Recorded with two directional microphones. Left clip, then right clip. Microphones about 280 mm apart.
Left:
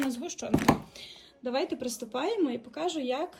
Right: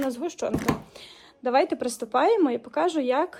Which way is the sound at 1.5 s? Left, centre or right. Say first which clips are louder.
Right 9 dB; centre.